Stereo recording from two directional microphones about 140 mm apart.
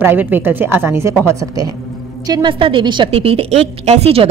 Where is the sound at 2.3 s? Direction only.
35° right (ahead or behind).